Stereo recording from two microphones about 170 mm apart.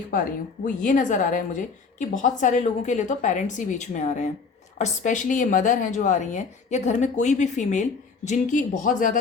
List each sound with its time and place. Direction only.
0.1 s a woman's voice: 55° left (ahead or behind)